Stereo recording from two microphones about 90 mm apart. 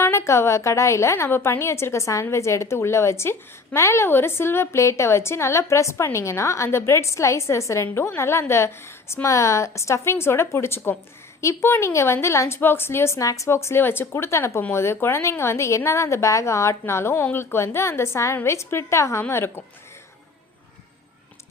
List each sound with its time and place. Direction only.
0.0 s a woman's voice: 30° left (ahead or behind)